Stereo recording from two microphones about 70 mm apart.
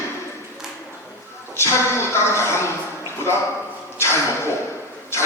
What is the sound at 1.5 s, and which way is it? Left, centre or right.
A man's voice, left.